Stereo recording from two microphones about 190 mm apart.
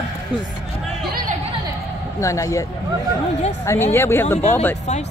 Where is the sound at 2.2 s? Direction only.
15° left (ahead or behind).